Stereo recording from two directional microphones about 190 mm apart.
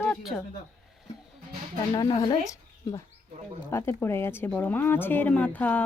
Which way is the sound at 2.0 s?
25° left (ahead or behind).